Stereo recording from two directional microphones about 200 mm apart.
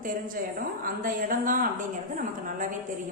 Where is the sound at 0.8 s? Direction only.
45° right (ahead or behind).